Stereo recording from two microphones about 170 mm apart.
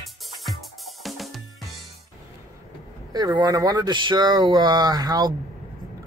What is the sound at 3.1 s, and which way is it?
Speech, 25° right (ahead or behind).